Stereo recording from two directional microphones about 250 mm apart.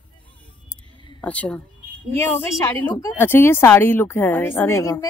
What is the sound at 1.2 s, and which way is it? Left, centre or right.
Speech, centre.